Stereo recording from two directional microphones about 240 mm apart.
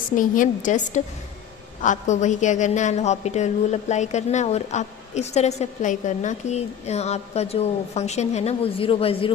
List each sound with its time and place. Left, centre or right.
0.2 s a woman's voice: left